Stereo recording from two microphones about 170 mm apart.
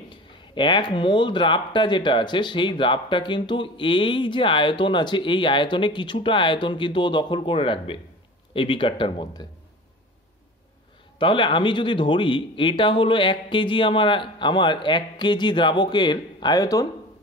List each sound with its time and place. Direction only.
0.1 s speech: 30° left (ahead or behind)
11.1 s speech: 30° left (ahead or behind)